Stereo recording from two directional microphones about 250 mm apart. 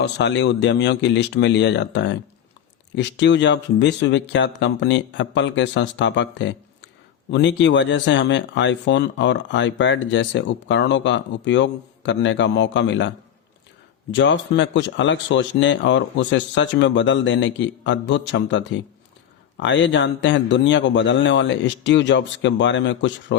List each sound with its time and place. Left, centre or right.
0.0 s speech: left
14.1 s speech: left